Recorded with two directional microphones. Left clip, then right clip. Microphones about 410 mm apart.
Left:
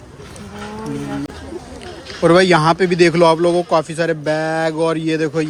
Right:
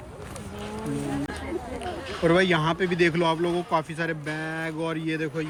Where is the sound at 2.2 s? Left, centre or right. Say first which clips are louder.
Left 10 dB; centre.